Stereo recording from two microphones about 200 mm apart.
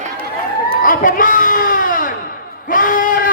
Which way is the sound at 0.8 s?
40° left (ahead or behind).